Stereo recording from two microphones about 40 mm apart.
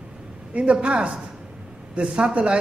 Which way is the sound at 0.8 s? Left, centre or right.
Right.